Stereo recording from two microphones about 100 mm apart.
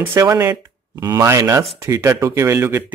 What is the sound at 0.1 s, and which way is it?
Speech, 30° right (ahead or behind).